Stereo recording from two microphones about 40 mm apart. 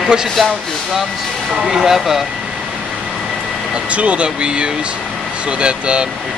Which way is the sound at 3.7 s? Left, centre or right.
Right.